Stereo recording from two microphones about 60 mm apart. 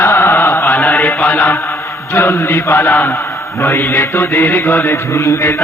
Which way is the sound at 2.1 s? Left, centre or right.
Left.